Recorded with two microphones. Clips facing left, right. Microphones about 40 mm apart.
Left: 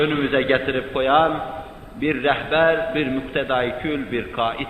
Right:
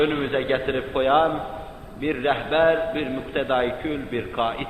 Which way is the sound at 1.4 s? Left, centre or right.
Centre.